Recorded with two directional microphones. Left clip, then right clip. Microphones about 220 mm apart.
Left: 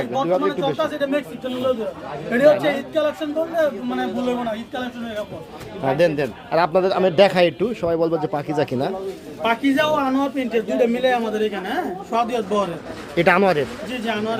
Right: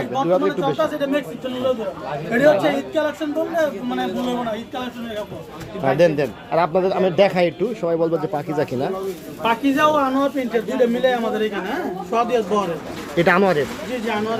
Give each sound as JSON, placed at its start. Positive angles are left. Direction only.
{"t": 0.1, "sound": "a man's voice", "side_deg": 0}
{"t": 2.3, "sound": "a man's voice", "side_deg": 5}
{"t": 5.8, "sound": "a man's voice", "side_deg": 0}
{"t": 6.6, "sound": "a man's voice", "side_deg": 15}
{"t": 9.5, "sound": "a man's voice", "side_deg": 25}
{"t": 11.6, "sound": "a man's voice", "side_deg": 20}
{"t": 13.1, "sound": "a man's voice", "side_deg": 10}
{"t": 14.1, "sound": "a man's voice", "side_deg": 25}